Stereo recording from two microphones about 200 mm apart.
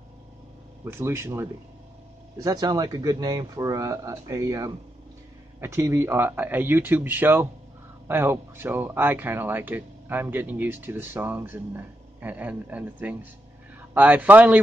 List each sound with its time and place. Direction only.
0.8 s speech: 15° right (ahead or behind)